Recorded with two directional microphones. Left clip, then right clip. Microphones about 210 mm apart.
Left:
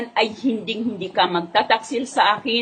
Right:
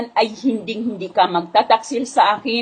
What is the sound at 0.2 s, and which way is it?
A woman's voice, 15° right (ahead or behind).